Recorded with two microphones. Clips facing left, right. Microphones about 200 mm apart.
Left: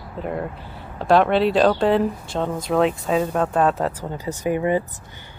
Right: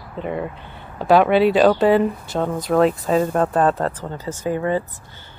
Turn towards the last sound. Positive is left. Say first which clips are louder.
# left 1 dB
turn(degrees=15)  # may be behind; listen again after turning